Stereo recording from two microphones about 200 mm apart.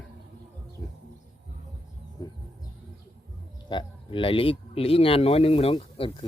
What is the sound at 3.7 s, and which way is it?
Speech, 25° left (ahead or behind).